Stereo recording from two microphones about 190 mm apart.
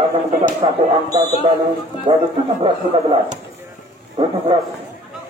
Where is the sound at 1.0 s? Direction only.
20° right (ahead or behind).